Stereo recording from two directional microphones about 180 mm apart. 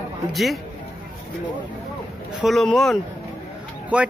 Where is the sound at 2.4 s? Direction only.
Centre (ahead or behind).